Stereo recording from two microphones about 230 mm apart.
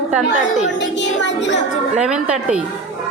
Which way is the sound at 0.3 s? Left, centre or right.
Left.